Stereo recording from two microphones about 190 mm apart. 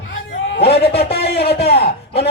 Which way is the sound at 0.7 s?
60° left (ahead or behind).